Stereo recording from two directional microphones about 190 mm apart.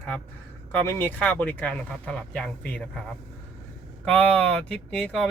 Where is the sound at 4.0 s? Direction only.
5° left (ahead or behind).